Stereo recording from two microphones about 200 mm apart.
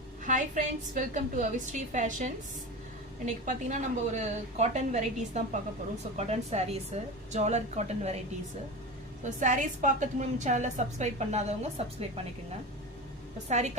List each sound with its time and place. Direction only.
0.3 s a woman's voice: 40° right (ahead or behind)
9.2 s a woman's voice: 40° right (ahead or behind)
13.5 s a woman's voice: 35° right (ahead or behind)